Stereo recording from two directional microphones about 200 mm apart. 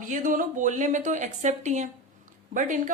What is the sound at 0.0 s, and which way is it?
A woman's voice, 40° right (ahead or behind).